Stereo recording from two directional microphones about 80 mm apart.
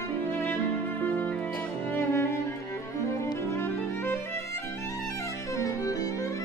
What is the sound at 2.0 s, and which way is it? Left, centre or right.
Cello, left.